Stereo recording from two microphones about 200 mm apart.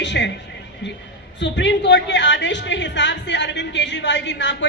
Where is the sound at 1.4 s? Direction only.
60° left (ahead or behind).